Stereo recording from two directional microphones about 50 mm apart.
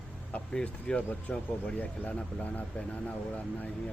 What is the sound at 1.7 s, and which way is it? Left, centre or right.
Speech, left.